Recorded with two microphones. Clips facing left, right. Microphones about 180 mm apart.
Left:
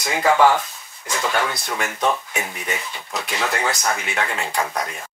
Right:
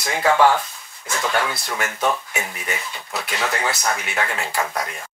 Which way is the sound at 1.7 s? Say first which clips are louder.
Even; 5° right (ahead or behind).